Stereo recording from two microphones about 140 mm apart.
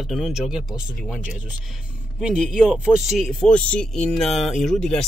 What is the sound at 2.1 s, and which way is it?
Speech, centre (ahead or behind).